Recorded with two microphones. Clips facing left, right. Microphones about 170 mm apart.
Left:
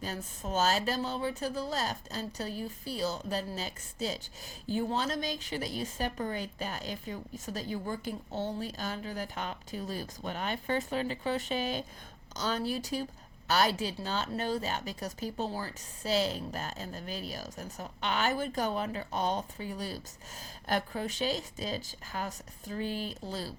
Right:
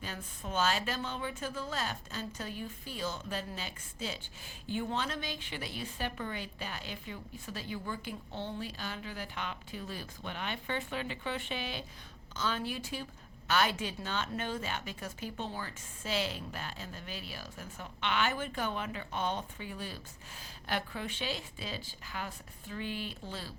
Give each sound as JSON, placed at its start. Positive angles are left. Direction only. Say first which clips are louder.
{"t": 0.0, "sound": "speech", "louder": "left 4 dB", "side_deg": 40}